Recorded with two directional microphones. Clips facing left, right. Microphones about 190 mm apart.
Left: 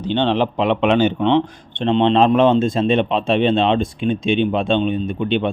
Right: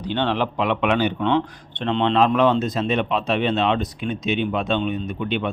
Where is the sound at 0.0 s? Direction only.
25° left (ahead or behind).